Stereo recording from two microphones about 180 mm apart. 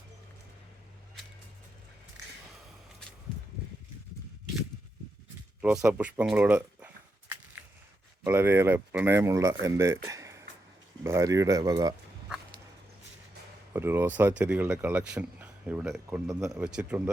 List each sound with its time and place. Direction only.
5.6 s speech: 5° right (ahead or behind)
8.2 s speech: 15° right (ahead or behind)
10.1 s a sound: 15° right (ahead or behind)
11.0 s speech: 15° right (ahead or behind)
13.7 s speech: 10° right (ahead or behind)